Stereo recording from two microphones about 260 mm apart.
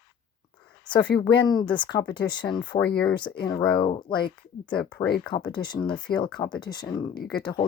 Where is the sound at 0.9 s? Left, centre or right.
Centre.